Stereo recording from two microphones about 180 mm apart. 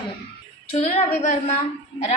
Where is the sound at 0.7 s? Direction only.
40° left (ahead or behind).